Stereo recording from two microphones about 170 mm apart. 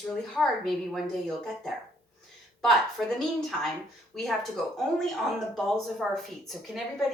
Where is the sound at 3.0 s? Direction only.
Centre (ahead or behind).